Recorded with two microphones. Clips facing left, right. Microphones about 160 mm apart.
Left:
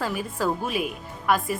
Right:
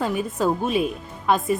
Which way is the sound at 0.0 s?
20° right (ahead or behind).